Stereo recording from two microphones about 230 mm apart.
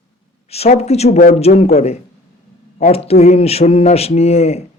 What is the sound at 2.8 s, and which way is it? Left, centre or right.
Speech, left.